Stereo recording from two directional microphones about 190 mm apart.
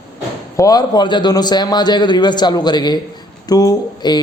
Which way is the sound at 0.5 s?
20° left (ahead or behind).